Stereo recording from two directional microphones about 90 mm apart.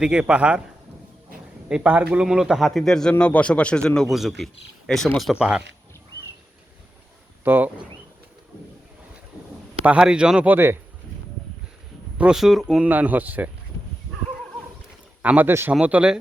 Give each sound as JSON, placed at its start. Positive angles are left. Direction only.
{"t": 0.0, "sound": "a man's voice", "side_deg": -10}
{"t": 1.7, "sound": "a man's voice", "side_deg": -15}
{"t": 2.6, "sound": "a man's voice", "side_deg": 5}
{"t": 7.4, "sound": "speech", "side_deg": -20}
{"t": 9.8, "sound": "a man's voice", "side_deg": -10}
{"t": 12.1, "sound": "a sound", "side_deg": -15}
{"t": 12.4, "sound": "speech", "side_deg": 0}
{"t": 15.2, "sound": "speech", "side_deg": -20}
{"t": 15.7, "sound": "a man's voice", "side_deg": -15}